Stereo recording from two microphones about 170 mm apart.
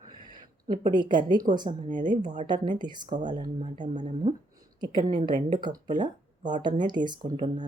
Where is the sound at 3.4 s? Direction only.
50° right (ahead or behind).